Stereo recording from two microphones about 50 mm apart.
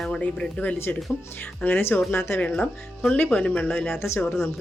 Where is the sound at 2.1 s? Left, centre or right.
Left.